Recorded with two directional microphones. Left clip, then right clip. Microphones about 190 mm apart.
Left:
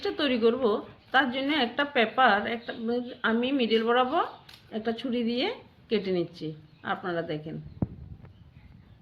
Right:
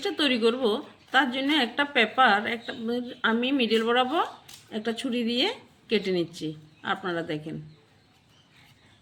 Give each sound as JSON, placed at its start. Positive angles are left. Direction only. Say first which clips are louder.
{"t": 0.0, "sound": "a woman's voice", "louder": "right 1 dB", "side_deg": 0}